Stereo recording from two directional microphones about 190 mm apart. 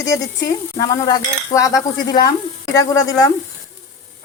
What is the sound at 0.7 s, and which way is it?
Stir, 20° left (ahead or behind).